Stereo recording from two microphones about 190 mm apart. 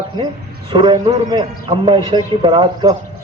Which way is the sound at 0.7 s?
25° right (ahead or behind).